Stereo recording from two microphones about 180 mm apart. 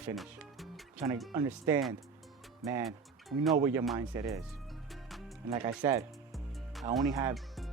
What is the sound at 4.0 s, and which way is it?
Speech, 20° right (ahead or behind).